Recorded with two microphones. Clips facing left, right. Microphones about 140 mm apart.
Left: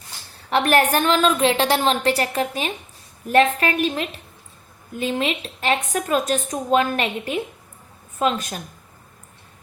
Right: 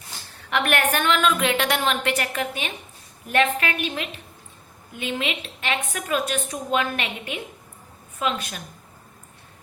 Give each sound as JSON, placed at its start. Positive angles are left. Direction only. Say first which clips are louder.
{"t": 0.3, "sound": "a woman's voice", "louder": "left 6 dB", "side_deg": 35}